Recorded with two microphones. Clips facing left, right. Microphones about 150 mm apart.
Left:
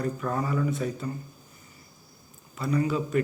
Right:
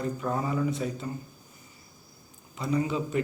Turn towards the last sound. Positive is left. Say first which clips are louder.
# left 2 dB
turn(degrees=-20)  # may be behind; listen again after turning